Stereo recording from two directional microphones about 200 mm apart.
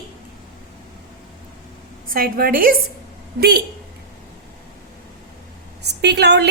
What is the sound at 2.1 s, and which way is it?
A woman's voice, 45° right (ahead or behind).